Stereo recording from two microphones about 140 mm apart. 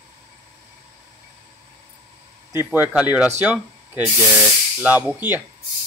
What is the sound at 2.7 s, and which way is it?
Speech, 10° right (ahead or behind).